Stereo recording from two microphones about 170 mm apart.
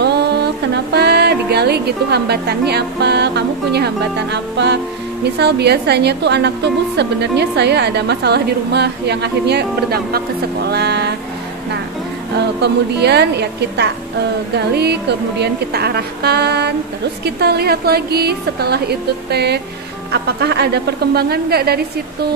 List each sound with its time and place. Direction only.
0.0 s music: 75° right (ahead or behind)
0.9 s a woman's voice: 75° right (ahead or behind); by 4.7 s 90° right
5.2 s a woman's voice: 75° right (ahead or behind)
12.5 s a woman's voice: 80° right